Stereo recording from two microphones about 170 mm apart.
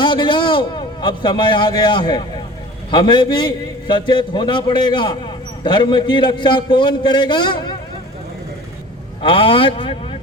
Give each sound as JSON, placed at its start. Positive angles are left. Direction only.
{"t": 0.0, "sound": "a man's voice", "side_deg": 30}
{"t": 9.2, "sound": "a man's voice", "side_deg": 30}